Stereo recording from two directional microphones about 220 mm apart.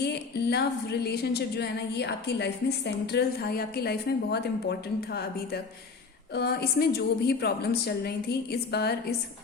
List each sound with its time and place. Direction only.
0.0 s a woman's voice: 50° left (ahead or behind)